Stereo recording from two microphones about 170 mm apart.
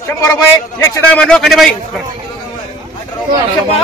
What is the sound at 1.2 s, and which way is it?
Speech, centre (ahead or behind).